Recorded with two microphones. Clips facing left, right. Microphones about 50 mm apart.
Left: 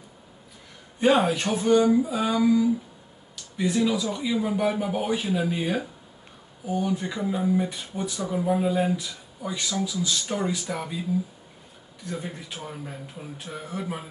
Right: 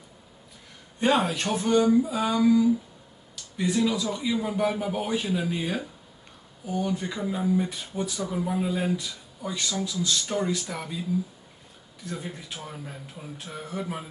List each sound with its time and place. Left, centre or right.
0.9 s speech: centre
12.0 s speech: centre